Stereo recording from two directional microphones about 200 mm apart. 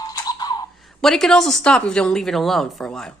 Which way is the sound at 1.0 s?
Centre (ahead or behind).